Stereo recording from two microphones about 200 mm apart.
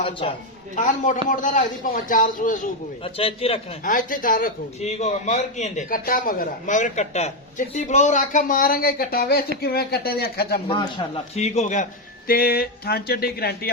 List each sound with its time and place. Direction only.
0.0 s a man's voice: 25° left (ahead or behind)
0.8 s a man's voice: 40° left (ahead or behind)
3.0 s a man's voice: 30° left (ahead or behind)
3.8 s a man's voice: 45° left (ahead or behind)
10.7 s a man's voice: 25° left (ahead or behind)
12.3 s speech: 50° left (ahead or behind)